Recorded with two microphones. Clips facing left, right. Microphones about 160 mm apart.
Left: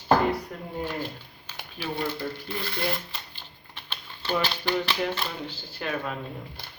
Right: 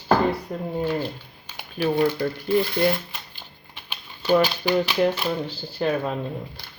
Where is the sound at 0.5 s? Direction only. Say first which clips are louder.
Right 8 dB; 25° right (ahead or behind).